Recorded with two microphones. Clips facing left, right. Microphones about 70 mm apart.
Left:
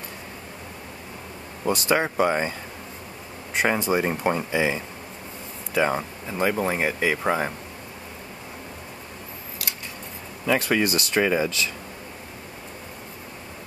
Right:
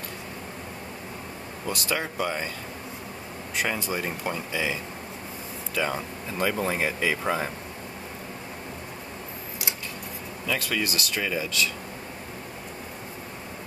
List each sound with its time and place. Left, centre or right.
1.7 s speech: left
3.5 s speech: left
5.8 s speech: left
10.4 s speech: left